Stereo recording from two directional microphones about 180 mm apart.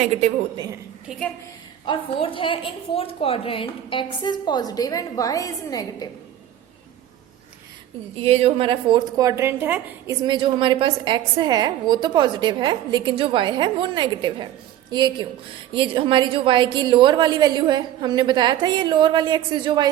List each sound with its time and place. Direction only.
0.5 s a woman's voice: 20° right (ahead or behind)
1.0 s a woman's voice: centre (ahead or behind)
1.9 s a woman's voice: 30° left (ahead or behind)
8.1 s a woman's voice: 35° right (ahead or behind); by 10.2 s 10° right (ahead or behind)
10.2 s a woman's voice: 25° right (ahead or behind)